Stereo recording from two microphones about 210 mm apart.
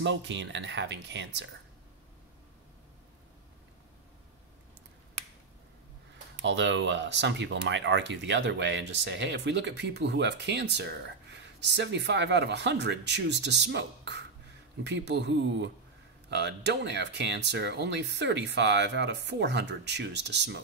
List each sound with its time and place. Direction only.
0.0 s speech: 60° right (ahead or behind)
6.4 s speech: 60° right (ahead or behind)